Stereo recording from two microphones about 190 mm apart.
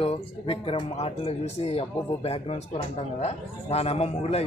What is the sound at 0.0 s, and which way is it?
Speech, 30° left (ahead or behind).